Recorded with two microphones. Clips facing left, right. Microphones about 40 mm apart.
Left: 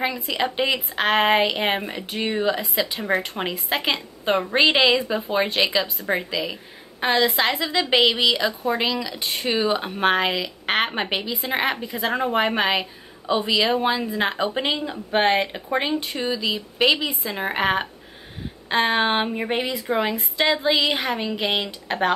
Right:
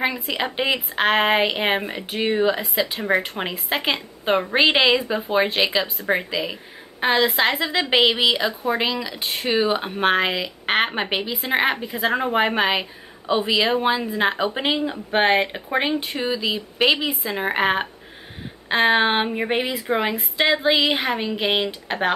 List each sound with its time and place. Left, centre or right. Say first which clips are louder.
0.0 s a woman's voice: even; centre
7.1 s a woman's voice: right 1 dB; right
7.5 s speech: right 1 dB; centre